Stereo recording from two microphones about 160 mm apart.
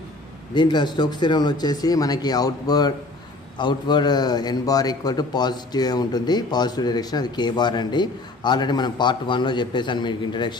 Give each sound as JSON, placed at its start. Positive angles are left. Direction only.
{"t": 0.6, "sound": "a man's voice", "side_deg": 30}